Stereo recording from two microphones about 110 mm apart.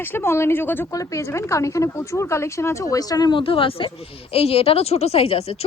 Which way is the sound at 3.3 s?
55° left (ahead or behind).